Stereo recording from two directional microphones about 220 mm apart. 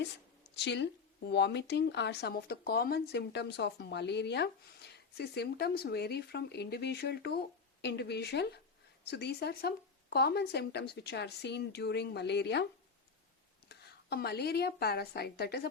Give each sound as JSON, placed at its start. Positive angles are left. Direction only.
{"t": 0.5, "sound": "speech", "side_deg": 50}
{"t": 13.7, "sound": "a woman's voice", "side_deg": 50}